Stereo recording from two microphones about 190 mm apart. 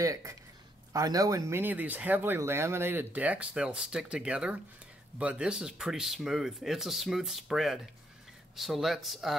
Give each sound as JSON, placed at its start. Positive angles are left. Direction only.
{"t": 0.0, "sound": "speech", "side_deg": -15}